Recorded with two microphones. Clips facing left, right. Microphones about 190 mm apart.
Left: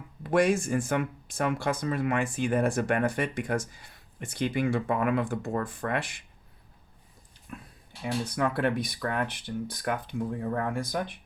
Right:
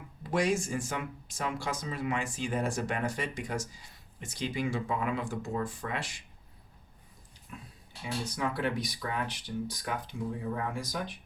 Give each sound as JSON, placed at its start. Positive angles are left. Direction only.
{"t": 0.2, "sound": "speech", "side_deg": 55}
{"t": 8.0, "sound": "speech", "side_deg": 55}